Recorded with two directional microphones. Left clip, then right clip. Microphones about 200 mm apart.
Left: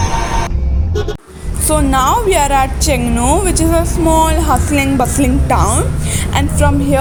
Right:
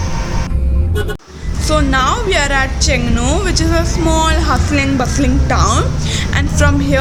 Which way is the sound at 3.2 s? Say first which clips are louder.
Left 3 dB; 5° left (ahead or behind).